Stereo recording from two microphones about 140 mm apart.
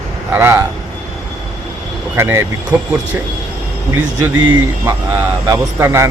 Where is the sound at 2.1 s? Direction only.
20° right (ahead or behind).